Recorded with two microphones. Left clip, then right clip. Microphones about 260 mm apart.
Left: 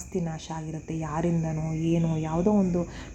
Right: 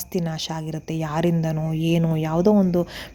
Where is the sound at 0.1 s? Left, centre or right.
Right.